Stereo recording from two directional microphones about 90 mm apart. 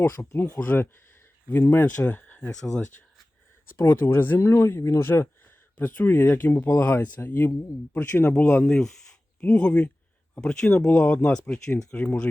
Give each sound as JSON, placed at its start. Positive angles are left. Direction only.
{"t": 0.0, "sound": "speech", "side_deg": 25}
{"t": 2.0, "sound": "a sound", "side_deg": 20}
{"t": 3.8, "sound": "speech", "side_deg": 25}
{"t": 8.6, "sound": "speech", "side_deg": 5}